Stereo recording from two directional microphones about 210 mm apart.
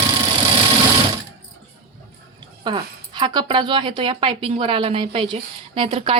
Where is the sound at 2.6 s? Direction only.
20° right (ahead or behind).